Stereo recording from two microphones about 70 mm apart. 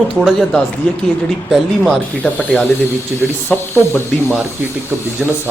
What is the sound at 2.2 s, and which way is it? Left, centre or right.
Speech, centre.